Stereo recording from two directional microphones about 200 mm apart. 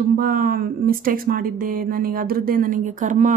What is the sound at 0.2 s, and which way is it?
A woman's voice, 45° right (ahead or behind).